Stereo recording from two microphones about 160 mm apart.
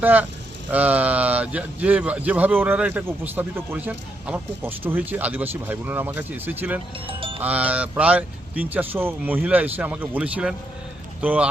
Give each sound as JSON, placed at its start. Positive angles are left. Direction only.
{"t": 0.0, "sound": "a man's voice", "side_deg": -10}
{"t": 7.1, "sound": "music", "side_deg": -35}
{"t": 7.4, "sound": "a man's voice", "side_deg": -10}